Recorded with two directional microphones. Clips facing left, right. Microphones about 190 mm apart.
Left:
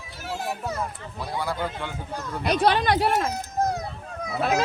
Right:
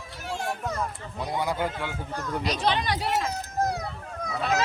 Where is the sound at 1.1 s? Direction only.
20° right (ahead or behind).